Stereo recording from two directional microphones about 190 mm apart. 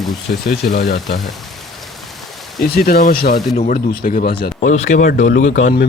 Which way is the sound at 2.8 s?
55° left (ahead or behind).